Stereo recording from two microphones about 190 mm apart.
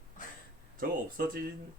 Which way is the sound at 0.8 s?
50° right (ahead or behind).